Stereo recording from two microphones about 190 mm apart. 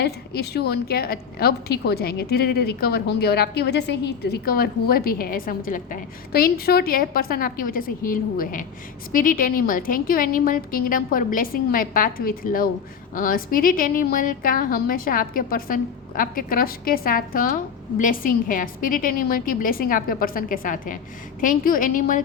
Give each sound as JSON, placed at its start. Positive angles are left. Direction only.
{"t": 0.0, "sound": "a woman's voice", "side_deg": 60}